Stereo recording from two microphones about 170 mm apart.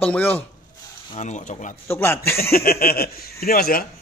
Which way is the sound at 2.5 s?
60° left (ahead or behind).